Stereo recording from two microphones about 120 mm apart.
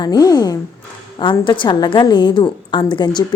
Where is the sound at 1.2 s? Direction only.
40° left (ahead or behind).